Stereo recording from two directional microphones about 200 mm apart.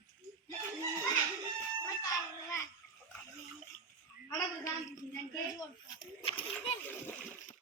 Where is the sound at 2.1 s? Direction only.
15° left (ahead or behind).